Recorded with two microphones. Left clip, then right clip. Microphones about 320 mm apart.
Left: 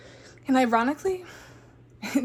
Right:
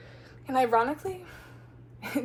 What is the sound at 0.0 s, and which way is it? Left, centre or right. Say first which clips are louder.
A woman's voice: left 6 dB; left.